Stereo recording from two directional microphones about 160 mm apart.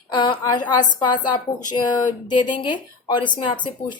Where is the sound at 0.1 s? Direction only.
25° left (ahead or behind).